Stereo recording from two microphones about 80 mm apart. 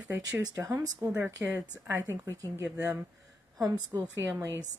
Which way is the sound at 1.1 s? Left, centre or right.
Right.